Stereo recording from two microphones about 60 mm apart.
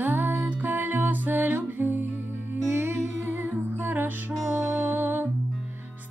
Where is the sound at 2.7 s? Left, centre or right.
Right.